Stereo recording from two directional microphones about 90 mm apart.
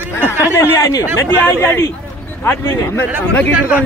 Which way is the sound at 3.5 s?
20° right (ahead or behind).